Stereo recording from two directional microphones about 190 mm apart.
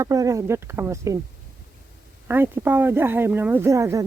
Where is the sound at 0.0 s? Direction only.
15° right (ahead or behind).